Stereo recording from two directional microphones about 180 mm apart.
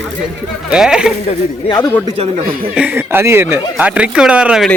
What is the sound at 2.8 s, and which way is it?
Speech, 10° right (ahead or behind).